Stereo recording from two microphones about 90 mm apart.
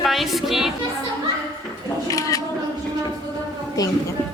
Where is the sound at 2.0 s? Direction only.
40° left (ahead or behind).